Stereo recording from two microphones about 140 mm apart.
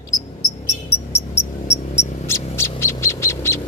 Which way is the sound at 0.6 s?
20° left (ahead or behind).